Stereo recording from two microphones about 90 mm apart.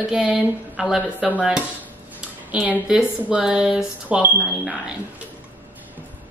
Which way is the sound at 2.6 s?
10° right (ahead or behind).